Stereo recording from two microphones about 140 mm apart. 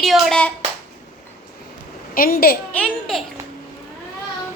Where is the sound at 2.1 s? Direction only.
90° left.